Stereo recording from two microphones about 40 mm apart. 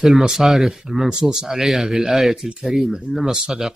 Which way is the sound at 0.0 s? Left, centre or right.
Centre.